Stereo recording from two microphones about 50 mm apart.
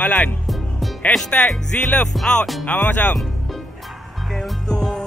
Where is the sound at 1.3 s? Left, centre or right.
Left.